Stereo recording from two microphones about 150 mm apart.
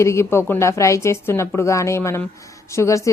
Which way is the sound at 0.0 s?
20° left (ahead or behind).